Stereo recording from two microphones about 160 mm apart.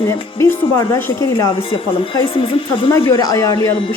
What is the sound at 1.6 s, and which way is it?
Speech, 35° left (ahead or behind).